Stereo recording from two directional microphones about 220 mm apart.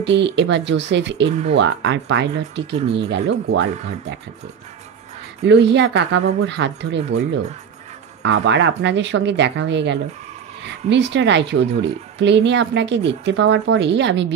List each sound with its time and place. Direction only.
0.0 s speech: 50° right (ahead or behind)
1.3 s speech: 30° right (ahead or behind)
1.6 s speech: 55° right (ahead or behind)
5.4 s speech: 50° right (ahead or behind)
8.2 s speech: 55° right (ahead or behind)